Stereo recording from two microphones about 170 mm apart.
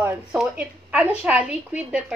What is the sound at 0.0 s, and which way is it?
A woman's voice, 15° right (ahead or behind).